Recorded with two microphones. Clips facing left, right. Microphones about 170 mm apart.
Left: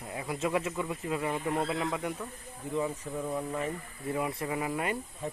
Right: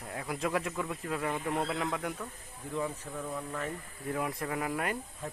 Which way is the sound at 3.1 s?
20° left (ahead or behind).